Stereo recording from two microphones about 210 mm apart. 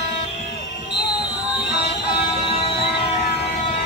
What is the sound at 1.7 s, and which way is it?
Music, 50° left (ahead or behind).